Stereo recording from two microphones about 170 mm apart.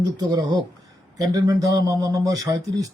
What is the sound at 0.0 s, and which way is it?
Speech, 20° right (ahead or behind).